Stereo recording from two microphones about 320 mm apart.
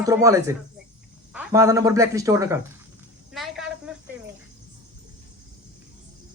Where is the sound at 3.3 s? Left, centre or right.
Centre.